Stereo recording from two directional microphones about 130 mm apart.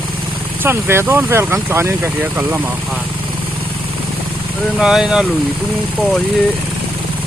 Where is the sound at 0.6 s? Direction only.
20° right (ahead or behind).